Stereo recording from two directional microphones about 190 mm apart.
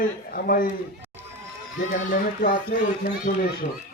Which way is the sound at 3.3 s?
40° left (ahead or behind).